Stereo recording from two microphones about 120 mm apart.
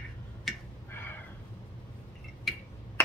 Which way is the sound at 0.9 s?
15° left (ahead or behind).